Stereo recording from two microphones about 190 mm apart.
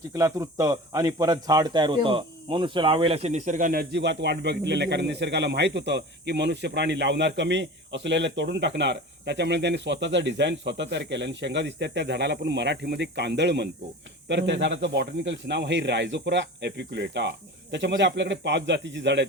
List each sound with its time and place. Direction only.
0.1 s speech: 15° right (ahead or behind); by 19.3 s 70° right (ahead or behind)